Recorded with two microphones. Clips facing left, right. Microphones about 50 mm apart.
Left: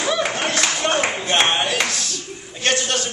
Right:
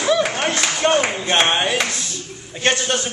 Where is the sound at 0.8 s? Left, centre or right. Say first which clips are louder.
Right 6 dB; right.